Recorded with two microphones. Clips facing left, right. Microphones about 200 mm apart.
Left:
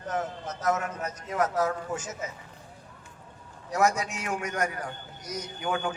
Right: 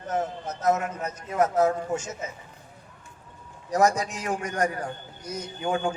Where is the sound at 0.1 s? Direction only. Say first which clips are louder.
Right 3 dB; 30° right (ahead or behind).